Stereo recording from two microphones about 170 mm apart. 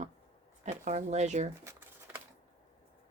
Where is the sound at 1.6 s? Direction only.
15° right (ahead or behind).